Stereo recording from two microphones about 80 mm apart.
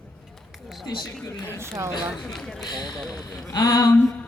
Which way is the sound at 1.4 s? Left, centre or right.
Right.